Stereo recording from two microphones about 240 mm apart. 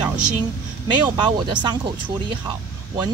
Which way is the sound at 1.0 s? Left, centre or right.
Centre.